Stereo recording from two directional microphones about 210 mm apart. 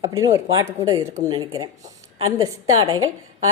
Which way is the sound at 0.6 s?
15° right (ahead or behind).